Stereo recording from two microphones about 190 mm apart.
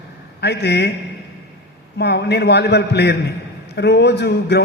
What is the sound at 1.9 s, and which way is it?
A man's voice, 60° left (ahead or behind).